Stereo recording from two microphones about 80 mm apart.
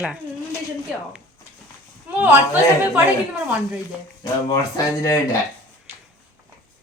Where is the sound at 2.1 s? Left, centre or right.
Right.